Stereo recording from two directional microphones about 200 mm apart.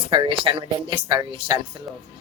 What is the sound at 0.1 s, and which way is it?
Speech, 25° right (ahead or behind).